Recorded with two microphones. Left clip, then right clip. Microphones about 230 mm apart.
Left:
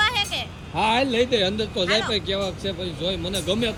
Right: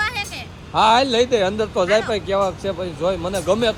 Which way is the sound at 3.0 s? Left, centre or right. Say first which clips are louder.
Right 6 dB; right.